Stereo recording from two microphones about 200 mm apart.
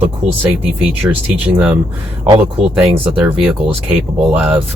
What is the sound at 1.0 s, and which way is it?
A man's voice, 15° right (ahead or behind).